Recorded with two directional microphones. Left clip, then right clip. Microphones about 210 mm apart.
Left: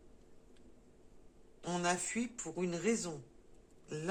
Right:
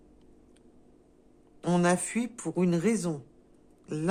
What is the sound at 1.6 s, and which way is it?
Speech, 55° right (ahead or behind).